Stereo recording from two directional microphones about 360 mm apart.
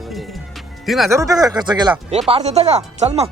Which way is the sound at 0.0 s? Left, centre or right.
Centre.